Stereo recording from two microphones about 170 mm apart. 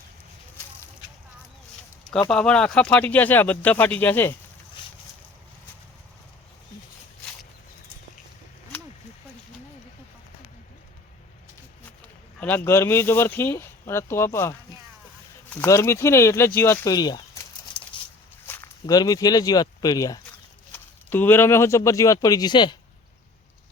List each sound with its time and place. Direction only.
2.3 s speech: 5° left (ahead or behind)
4.8 s boat: 30° left (ahead or behind)
12.4 s speech: 10° left (ahead or behind)
15.6 s speech: 20° left (ahead or behind)
18.4 s speech: 15° left (ahead or behind)
20.7 s speech: 10° left (ahead or behind)